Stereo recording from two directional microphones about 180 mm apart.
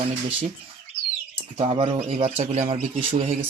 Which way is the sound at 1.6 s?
30° right (ahead or behind).